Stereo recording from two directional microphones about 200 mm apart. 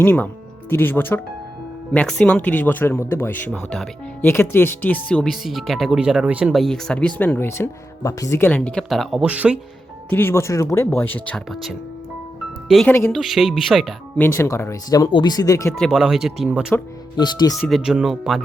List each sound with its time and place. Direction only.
0.0 s speech: 10° left (ahead or behind); by 9.6 s 5° right (ahead or behind)
10.1 s speech: 10° left (ahead or behind)
14.3 s speech: 15° left (ahead or behind)
15.7 s speech: centre (ahead or behind)
17.2 s speech: 20° left (ahead or behind)
17.6 s speech: centre (ahead or behind)